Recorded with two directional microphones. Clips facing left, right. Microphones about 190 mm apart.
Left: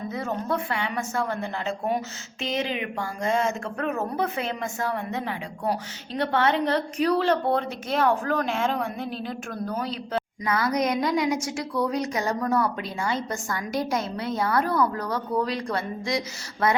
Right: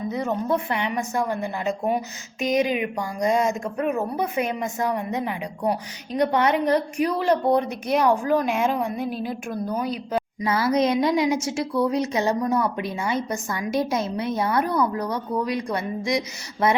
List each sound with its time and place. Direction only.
0.1 s a woman's voice: 20° right (ahead or behind)
10.4 s a woman's voice: 25° right (ahead or behind)